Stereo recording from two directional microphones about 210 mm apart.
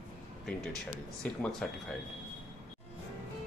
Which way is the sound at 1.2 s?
5° left (ahead or behind).